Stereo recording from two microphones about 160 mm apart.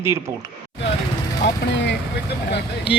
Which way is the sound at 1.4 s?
90° left.